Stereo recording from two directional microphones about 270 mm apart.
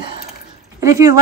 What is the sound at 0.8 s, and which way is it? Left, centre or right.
Speech, centre.